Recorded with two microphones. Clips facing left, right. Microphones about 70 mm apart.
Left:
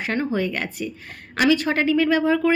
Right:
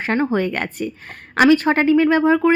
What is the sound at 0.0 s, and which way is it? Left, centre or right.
A woman's voice, right.